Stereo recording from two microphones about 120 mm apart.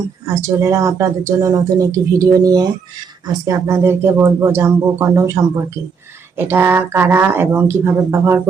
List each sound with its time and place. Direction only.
0.3 s speech: 25° right (ahead or behind)